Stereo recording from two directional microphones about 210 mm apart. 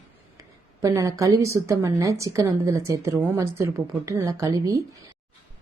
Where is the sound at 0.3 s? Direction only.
15° right (ahead or behind).